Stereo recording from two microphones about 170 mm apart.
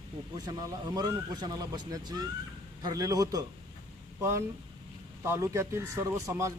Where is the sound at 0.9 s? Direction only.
25° right (ahead or behind).